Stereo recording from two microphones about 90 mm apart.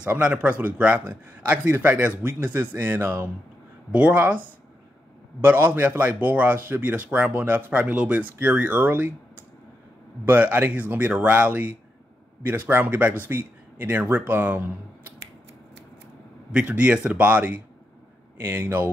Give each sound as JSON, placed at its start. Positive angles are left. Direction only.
{"t": 0.0, "sound": "a man's voice", "side_deg": -15}
{"t": 5.4, "sound": "a man's voice", "side_deg": -20}
{"t": 10.2, "sound": "a man's voice", "side_deg": -20}
{"t": 16.5, "sound": "a man's voice", "side_deg": -15}